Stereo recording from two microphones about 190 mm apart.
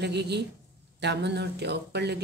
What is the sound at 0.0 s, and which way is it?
Speech, 60° right (ahead or behind).